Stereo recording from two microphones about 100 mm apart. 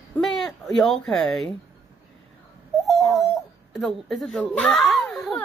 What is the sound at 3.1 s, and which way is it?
A child's voice, centre (ahead or behind).